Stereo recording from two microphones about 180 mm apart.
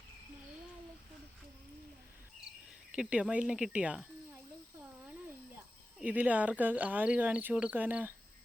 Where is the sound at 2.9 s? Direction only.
5° right (ahead or behind).